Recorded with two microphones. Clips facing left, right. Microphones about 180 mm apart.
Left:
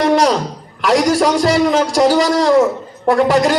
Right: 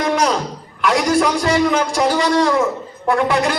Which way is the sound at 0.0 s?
40° left (ahead or behind).